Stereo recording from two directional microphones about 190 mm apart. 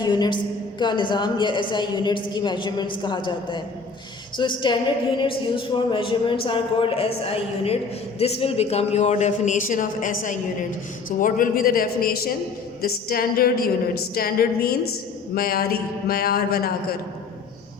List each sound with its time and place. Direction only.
0.0 s a woman's voice: 25° left (ahead or behind); by 16.7 s 55° left (ahead or behind)